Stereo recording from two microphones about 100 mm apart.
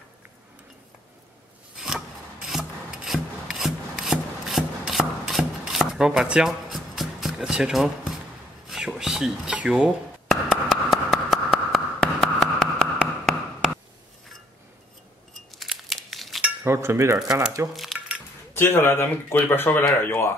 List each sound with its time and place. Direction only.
1.8 s filing: 5° right (ahead or behind)
5.7 s a sound: 5° right (ahead or behind)
8.6 s whispering: 5° right (ahead or behind)
10.9 s hands: centre (ahead or behind)
15.5 s crumpling: centre (ahead or behind)
16.6 s cutlery: 25° right (ahead or behind)
17.2 s speech: 5° right (ahead or behind)
17.7 s a sound: centre (ahead or behind)
18.5 s speech: 25° left (ahead or behind)